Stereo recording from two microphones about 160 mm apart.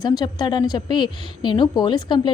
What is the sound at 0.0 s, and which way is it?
A woman's voice, 25° left (ahead or behind).